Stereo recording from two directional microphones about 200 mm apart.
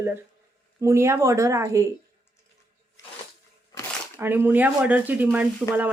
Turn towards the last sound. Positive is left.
turn(degrees=-10)  # may be behind; listen again after turning